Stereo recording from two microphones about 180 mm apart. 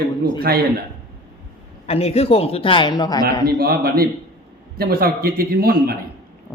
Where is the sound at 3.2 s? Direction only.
60° right (ahead or behind).